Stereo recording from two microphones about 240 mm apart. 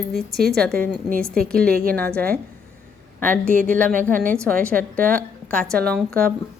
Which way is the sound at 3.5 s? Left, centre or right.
Right.